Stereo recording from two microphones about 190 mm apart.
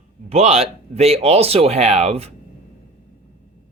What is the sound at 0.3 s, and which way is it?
Speech, 35° right (ahead or behind).